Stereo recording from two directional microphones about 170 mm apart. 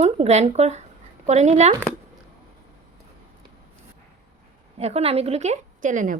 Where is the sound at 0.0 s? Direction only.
40° right (ahead or behind).